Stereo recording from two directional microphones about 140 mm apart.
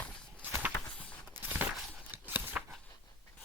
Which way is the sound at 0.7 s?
10° left (ahead or behind).